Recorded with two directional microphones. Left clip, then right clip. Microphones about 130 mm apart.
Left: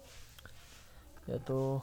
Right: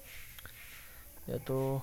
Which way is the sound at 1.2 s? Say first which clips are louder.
Right 1 dB; centre (ahead or behind).